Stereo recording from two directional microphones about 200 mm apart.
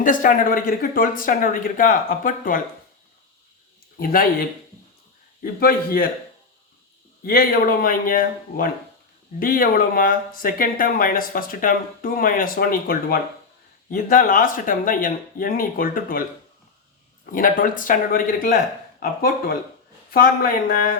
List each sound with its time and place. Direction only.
0.0 s speech: 40° left (ahead or behind)
4.0 s speech: 45° left (ahead or behind)
7.3 s speech: 45° left (ahead or behind)
17.3 s speech: 45° left (ahead or behind)
20.1 s speech: 45° left (ahead or behind)